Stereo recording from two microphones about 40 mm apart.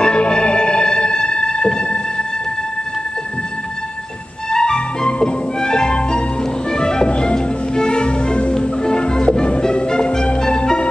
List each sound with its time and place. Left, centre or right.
0.0 s music: left
4.5 s music: centre